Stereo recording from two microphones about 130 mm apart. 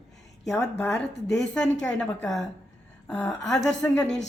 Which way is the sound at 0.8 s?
5° left (ahead or behind).